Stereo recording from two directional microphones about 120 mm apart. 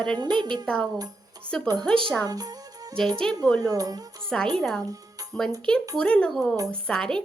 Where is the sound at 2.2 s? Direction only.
30° right (ahead or behind).